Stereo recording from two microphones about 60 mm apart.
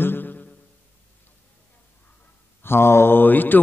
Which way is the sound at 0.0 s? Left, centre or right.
Left.